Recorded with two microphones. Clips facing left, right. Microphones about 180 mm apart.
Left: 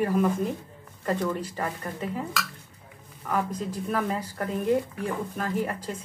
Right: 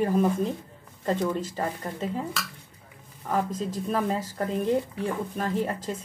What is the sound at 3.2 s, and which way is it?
Speech, 25° right (ahead or behind).